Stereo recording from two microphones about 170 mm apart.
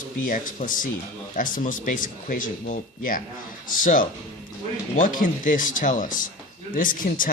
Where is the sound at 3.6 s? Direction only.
50° left (ahead or behind).